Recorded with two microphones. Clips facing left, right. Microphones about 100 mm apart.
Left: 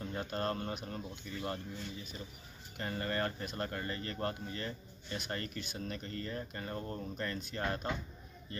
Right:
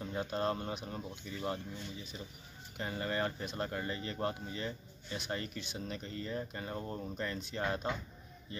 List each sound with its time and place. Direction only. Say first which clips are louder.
0.0 s speech: right 2 dB; 15° right (ahead or behind)
2.8 s speech: even; 15° right (ahead or behind)